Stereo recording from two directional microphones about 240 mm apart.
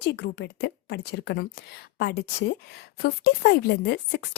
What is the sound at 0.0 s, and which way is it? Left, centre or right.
Speech, left.